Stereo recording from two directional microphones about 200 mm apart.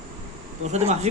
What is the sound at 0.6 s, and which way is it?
Speech, 35° right (ahead or behind).